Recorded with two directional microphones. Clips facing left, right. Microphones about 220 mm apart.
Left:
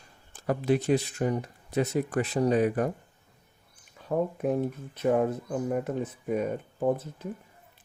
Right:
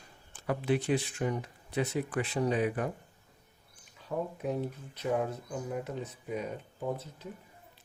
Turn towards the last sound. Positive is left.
turn(degrees=50)  # may be behind; listen again after turning